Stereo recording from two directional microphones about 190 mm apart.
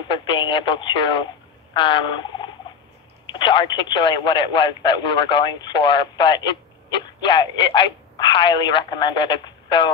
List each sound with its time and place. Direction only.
0.1 s speech: 25° left (ahead or behind)
1.7 s turkey: 25° left (ahead or behind)
3.3 s speech: 25° left (ahead or behind)